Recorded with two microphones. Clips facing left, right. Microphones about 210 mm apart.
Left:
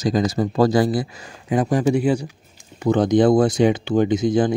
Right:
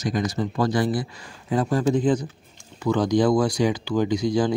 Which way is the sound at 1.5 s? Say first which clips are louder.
Left 3 dB; 15° left (ahead or behind).